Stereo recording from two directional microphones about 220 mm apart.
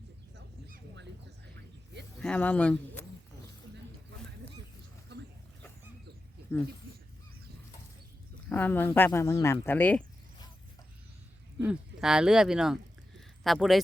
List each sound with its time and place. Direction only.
0.3 s a sound: 50° right (ahead or behind)
2.1 s speech: 5° left (ahead or behind)
5.1 s a sound: 50° right (ahead or behind)
6.5 s speech: 10° left (ahead or behind)
8.4 s speech: 10° left (ahead or behind)
11.6 s speech: 5° right (ahead or behind)